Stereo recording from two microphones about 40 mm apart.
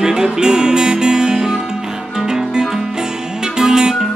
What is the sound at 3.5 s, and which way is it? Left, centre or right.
Music, centre.